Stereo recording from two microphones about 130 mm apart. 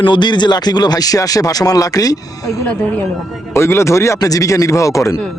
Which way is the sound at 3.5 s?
20° left (ahead or behind).